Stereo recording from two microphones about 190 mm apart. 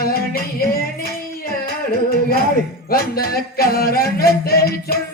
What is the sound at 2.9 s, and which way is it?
Music, 50° left (ahead or behind).